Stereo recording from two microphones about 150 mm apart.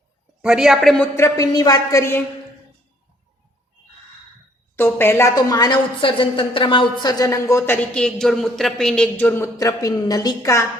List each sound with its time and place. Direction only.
0.4 s a woman's voice: 5° right (ahead or behind)
1.1 s a woman's voice: 20° left (ahead or behind)
4.8 s a woman's voice: 15° left (ahead or behind)
7.8 s speech: 5° left (ahead or behind); by 10.7 s 20° left (ahead or behind)